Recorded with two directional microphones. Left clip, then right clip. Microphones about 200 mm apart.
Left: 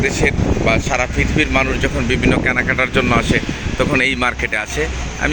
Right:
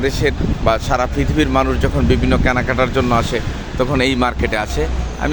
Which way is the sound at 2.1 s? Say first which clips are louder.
Even; 5° right (ahead or behind).